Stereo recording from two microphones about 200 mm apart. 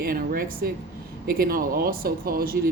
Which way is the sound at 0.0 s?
45° right (ahead or behind).